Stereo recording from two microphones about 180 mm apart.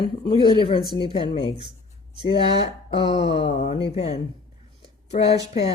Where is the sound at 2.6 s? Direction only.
30° left (ahead or behind).